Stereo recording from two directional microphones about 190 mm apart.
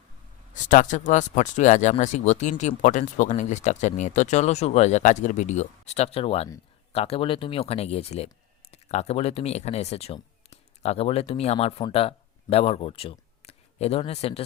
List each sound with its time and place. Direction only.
0.5 s speech: 40° left (ahead or behind)